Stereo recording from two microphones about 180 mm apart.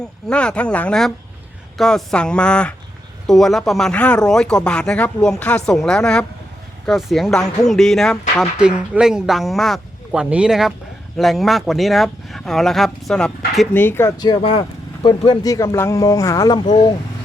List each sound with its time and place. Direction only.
0.0 s speech: 5° left (ahead or behind); by 16.6 s 20° left (ahead or behind)